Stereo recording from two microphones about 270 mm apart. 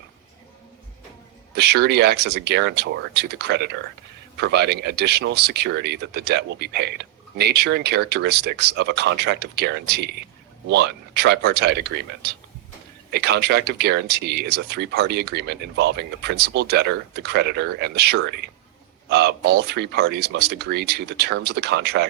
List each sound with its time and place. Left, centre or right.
1.5 s speech: right